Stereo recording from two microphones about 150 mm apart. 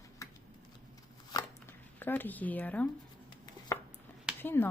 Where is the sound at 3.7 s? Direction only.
20° left (ahead or behind).